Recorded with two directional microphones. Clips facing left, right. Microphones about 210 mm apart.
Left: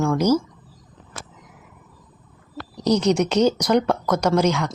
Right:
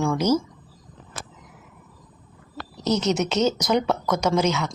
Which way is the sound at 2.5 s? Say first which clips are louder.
Left 4 dB; 15° left (ahead or behind).